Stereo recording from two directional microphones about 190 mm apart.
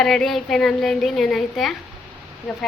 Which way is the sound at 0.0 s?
Centre (ahead or behind).